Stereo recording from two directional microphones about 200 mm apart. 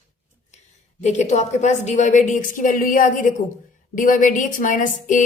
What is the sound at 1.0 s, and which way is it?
A woman's voice, 35° left (ahead or behind).